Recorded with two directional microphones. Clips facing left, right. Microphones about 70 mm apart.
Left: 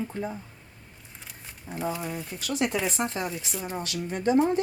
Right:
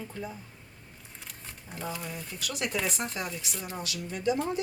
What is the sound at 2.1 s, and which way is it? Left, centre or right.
Speech, left.